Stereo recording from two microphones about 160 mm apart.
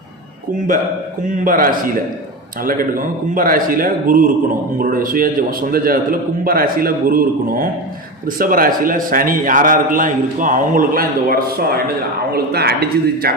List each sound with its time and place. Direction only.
1.5 s a man's voice: 60° right (ahead or behind); by 13.3 s 75° right (ahead or behind)